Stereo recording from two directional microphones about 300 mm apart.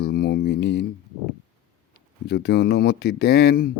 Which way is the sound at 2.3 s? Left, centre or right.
Left.